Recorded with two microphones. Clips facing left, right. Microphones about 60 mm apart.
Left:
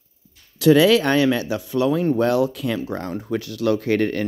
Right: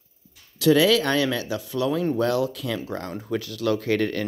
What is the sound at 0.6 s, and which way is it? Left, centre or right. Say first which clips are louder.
Speech: left 4 dB; left.